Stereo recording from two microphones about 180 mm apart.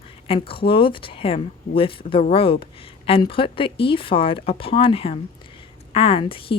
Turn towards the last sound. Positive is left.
turn(degrees=30)  # may be behind; listen again after turning